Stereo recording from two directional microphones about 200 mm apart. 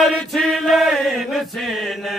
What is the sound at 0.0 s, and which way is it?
Chant, centre (ahead or behind).